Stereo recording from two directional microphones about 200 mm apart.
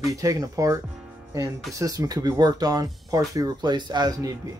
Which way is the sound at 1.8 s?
15° right (ahead or behind).